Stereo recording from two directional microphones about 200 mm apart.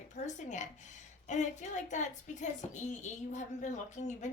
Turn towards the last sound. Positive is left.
turn(degrees=35)  # may be behind; listen again after turning